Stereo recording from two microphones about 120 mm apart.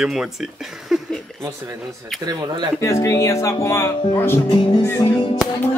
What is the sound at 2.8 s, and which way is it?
Speech, 25° left (ahead or behind).